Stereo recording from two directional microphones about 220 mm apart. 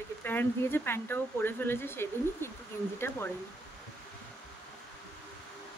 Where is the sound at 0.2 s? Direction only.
10° left (ahead or behind).